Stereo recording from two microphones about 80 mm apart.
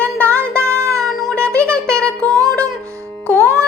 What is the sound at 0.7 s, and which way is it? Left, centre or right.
Music, right.